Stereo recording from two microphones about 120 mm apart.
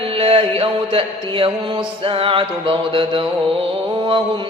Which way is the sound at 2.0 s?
50° right (ahead or behind).